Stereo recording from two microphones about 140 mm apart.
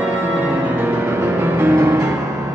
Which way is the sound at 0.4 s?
15° right (ahead or behind).